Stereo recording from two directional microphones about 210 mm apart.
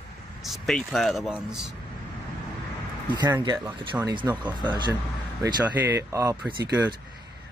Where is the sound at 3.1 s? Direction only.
20° right (ahead or behind).